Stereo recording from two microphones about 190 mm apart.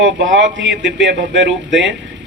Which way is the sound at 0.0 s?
75° right (ahead or behind).